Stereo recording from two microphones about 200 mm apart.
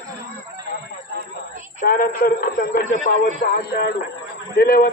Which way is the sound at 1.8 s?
45° left (ahead or behind).